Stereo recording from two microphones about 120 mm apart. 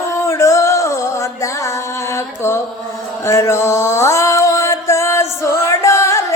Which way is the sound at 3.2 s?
25° left (ahead or behind).